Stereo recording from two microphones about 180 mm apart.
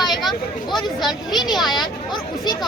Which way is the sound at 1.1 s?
25° left (ahead or behind).